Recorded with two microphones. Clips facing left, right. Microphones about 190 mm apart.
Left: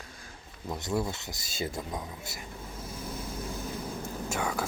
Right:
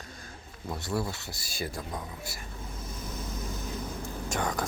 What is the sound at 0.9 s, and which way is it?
Speech, 20° left (ahead or behind).